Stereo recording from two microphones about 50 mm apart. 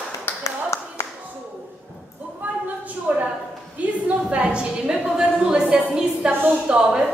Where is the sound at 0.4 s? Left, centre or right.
Left.